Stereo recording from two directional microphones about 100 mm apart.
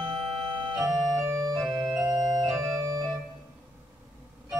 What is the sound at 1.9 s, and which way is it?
Organ, 35° right (ahead or behind).